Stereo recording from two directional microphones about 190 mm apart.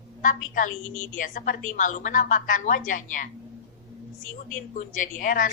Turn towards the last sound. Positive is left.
turn(degrees=45)  # may be behind; listen again after turning